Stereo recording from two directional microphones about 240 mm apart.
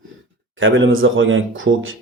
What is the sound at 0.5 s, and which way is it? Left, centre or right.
Speech, right.